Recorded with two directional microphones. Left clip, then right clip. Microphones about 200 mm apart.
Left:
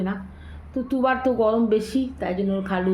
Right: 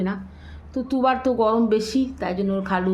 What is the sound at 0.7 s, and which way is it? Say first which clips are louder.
Speech: right 1 dB; centre (ahead or behind).